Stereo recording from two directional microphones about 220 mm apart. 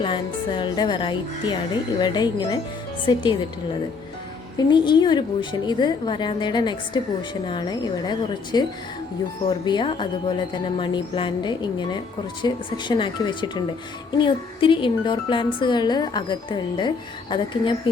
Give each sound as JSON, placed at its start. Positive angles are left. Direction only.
{"t": 0.0, "sound": "speech", "side_deg": 20}
{"t": 4.5, "sound": "speech", "side_deg": 20}